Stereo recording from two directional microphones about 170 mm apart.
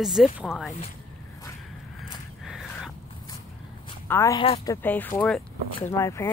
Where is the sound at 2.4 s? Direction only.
5° right (ahead or behind).